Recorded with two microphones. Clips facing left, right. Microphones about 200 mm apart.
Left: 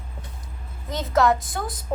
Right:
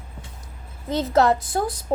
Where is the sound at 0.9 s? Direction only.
30° right (ahead or behind).